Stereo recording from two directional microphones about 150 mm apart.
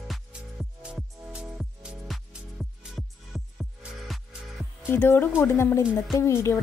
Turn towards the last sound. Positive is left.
turn(degrees=20)  # may be behind; listen again after turning